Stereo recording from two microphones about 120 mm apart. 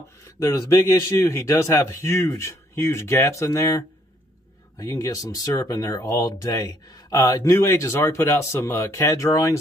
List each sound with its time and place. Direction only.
0.5 s speech: 20° left (ahead or behind)